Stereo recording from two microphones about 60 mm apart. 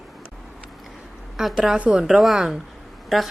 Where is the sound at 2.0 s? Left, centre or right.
Centre.